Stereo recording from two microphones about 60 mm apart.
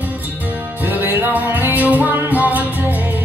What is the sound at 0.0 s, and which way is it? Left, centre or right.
Music, right.